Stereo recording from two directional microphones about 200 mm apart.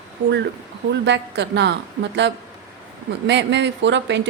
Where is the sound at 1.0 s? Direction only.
60° right (ahead or behind).